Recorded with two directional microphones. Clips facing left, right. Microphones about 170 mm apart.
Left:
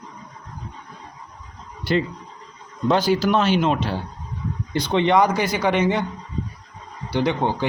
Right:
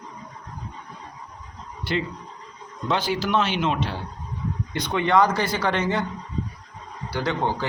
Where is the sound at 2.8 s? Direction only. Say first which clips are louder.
Left 6 dB; 40° left (ahead or behind).